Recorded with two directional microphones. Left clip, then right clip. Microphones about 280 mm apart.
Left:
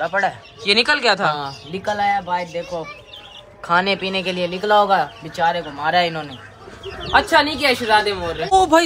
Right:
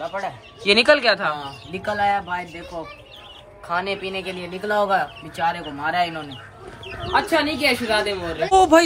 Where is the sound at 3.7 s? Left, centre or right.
Left.